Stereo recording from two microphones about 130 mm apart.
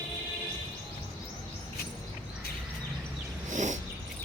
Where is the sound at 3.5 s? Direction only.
70° right (ahead or behind).